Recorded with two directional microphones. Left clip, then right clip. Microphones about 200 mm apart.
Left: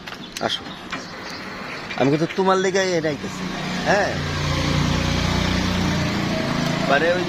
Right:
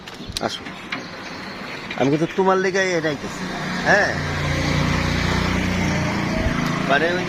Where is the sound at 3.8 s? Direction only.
20° right (ahead or behind).